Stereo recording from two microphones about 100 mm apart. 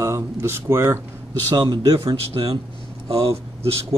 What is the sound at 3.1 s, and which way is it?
Speech, 80° right.